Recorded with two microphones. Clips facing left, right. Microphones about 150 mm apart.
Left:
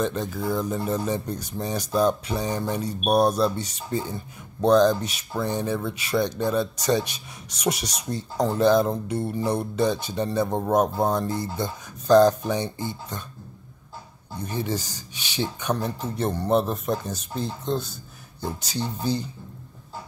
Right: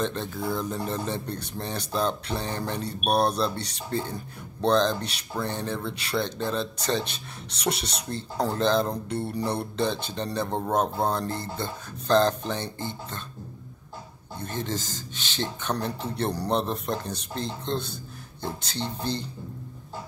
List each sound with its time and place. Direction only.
0.0 s speech: 5° left (ahead or behind)
14.4 s speech: 10° left (ahead or behind)